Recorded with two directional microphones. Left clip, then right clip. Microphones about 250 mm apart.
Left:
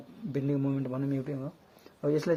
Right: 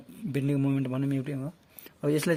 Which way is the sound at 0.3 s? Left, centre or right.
Right.